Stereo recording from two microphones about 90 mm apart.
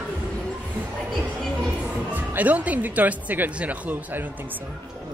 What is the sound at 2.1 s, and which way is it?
Speech, 20° right (ahead or behind).